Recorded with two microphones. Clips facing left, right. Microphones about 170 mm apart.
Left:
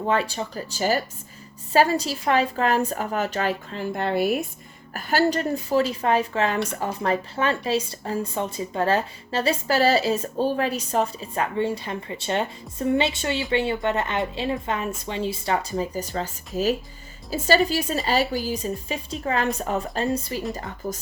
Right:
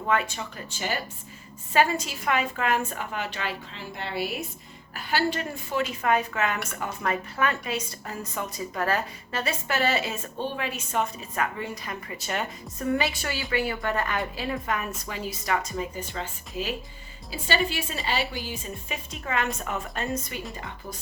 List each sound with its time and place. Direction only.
0.0 s a woman's voice: 30° left (ahead or behind)
17.3 s a woman's voice: 40° left (ahead or behind)